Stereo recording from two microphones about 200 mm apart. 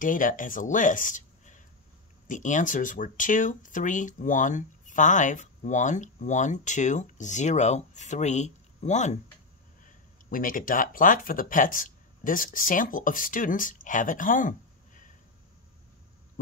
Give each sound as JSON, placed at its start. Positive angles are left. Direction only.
{"t": 0.0, "sound": "speech", "side_deg": 40}
{"t": 10.3, "sound": "speech", "side_deg": 45}